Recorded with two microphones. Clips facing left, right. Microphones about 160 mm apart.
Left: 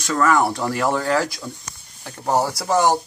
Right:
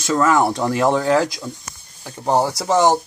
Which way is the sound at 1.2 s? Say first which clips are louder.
Right 3 dB; 5° right (ahead or behind).